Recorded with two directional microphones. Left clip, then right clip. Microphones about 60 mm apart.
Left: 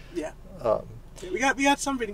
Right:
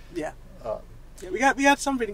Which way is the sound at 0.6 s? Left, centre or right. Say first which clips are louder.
Left 7 dB; left.